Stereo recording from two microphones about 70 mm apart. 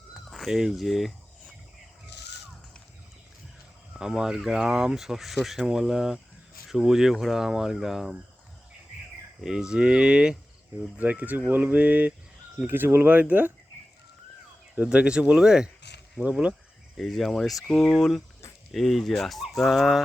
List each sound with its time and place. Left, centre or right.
0.1 s speech: centre
3.9 s speech: centre
9.4 s speech: centre; by 13.5 s right
14.8 s speech: centre
17.0 s speech: centre